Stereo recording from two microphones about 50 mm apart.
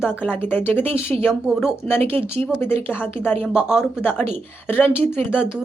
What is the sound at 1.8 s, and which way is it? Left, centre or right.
A woman's voice, left.